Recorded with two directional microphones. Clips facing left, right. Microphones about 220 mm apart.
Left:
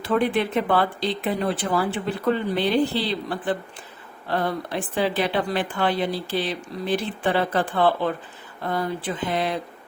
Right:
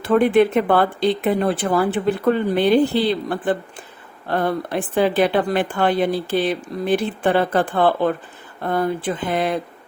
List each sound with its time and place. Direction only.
0.0 s speech: 50° right (ahead or behind)